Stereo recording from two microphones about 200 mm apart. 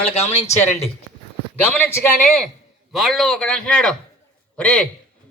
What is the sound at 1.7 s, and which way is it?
A man's voice, 10° left (ahead or behind).